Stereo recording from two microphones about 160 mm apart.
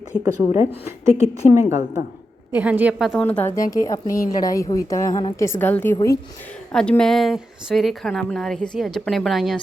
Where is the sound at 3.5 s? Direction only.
20° left (ahead or behind).